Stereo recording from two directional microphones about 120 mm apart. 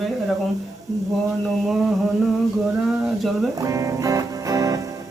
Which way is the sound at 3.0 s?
Centre (ahead or behind).